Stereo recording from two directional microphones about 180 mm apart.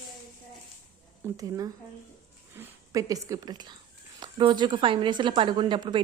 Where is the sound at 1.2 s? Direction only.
20° right (ahead or behind).